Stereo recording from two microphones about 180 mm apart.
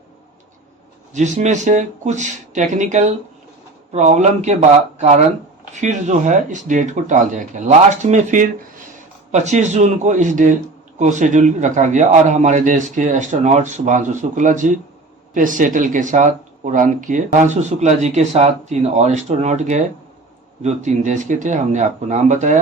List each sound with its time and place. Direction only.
1.1 s a man's voice: 40° right (ahead or behind)